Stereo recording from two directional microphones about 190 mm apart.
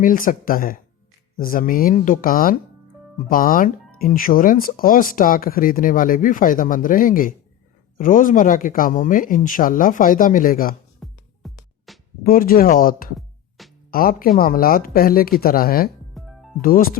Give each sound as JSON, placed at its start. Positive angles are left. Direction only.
{"t": 0.0, "sound": "speech", "side_deg": 45}
{"t": 11.0, "sound": "music", "side_deg": 0}
{"t": 12.2, "sound": "speech", "side_deg": 50}
{"t": 13.6, "sound": "music", "side_deg": 0}
{"t": 13.9, "sound": "speech", "side_deg": 50}
{"t": 16.1, "sound": "music", "side_deg": 0}
{"t": 16.6, "sound": "speech", "side_deg": 45}